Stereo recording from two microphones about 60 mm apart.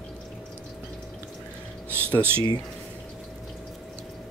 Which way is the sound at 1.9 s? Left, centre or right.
Right.